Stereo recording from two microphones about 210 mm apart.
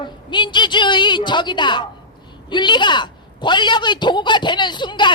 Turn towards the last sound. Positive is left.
turn(degrees=20)  # may be behind; listen again after turning